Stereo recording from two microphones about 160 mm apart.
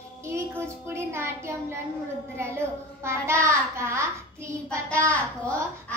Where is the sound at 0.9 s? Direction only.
15° right (ahead or behind).